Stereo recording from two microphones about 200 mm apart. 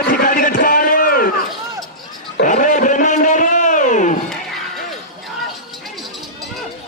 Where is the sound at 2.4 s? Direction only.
40° left (ahead or behind).